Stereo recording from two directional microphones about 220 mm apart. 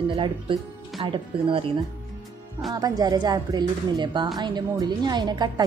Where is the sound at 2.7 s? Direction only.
15° right (ahead or behind).